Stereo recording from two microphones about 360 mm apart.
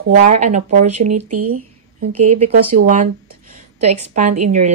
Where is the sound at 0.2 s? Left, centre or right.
Centre.